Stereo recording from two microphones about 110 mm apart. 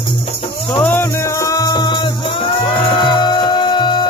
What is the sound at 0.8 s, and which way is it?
Music, 15° left (ahead or behind).